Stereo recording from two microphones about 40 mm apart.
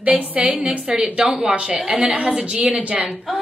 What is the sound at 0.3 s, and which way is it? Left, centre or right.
Speech, right.